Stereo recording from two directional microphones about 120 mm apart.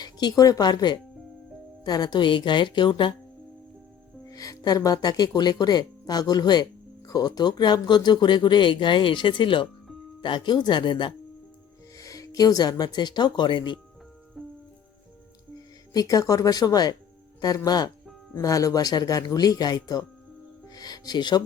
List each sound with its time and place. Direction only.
0.0 s speech: 35° left (ahead or behind)
4.3 s speech: 30° left (ahead or behind)
11.9 s speech: 30° left (ahead or behind)
14.4 s music: 5° right (ahead or behind)
15.9 s speech: 30° left (ahead or behind)
20.7 s music: 30° left (ahead or behind)